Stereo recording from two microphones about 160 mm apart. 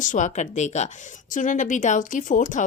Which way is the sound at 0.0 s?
50° left (ahead or behind).